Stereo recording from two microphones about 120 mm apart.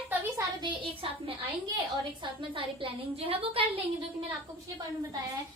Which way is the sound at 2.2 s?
45° right (ahead or behind).